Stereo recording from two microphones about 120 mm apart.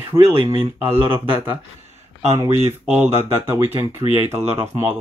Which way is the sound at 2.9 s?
20° right (ahead or behind).